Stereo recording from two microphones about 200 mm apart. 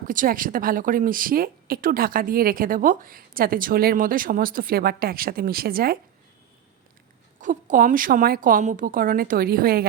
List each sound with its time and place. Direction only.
0.1 s a woman's voice: 40° right (ahead or behind)
7.4 s a woman's voice: 40° right (ahead or behind)